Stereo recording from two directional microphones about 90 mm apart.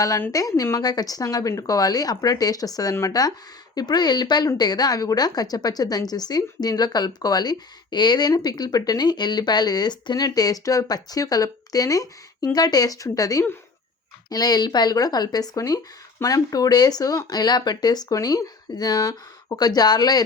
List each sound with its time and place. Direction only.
0.3 s a woman's voice: 40° left (ahead or behind)